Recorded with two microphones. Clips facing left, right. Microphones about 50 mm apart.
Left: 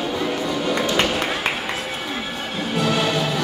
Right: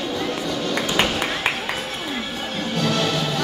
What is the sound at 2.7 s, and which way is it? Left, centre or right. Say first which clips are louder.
Music: left 2 dB; centre.